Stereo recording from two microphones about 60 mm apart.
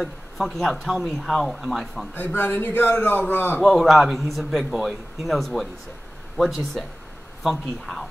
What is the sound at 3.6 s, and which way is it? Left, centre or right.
A man's voice, centre.